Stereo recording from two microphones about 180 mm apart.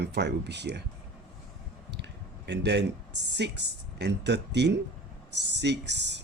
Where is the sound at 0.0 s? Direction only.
70° right (ahead or behind).